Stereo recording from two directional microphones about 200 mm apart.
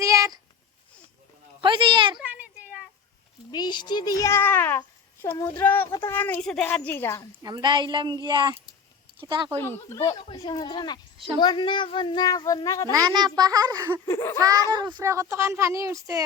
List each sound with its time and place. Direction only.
0.0 s a sound: 15° right (ahead or behind)
1.6 s a sound: 25° right (ahead or behind)
2.1 s a sound: 10° right (ahead or behind)
3.5 s a child's voice: 20° left (ahead or behind)
7.4 s speech: 20° right (ahead or behind)
9.6 s a child's voice: 15° left (ahead or behind)
12.9 s a child's voice: 20° right (ahead or behind)
14.1 s a child's voice: 15° left (ahead or behind)
14.4 s a child's voice: 15° right (ahead or behind)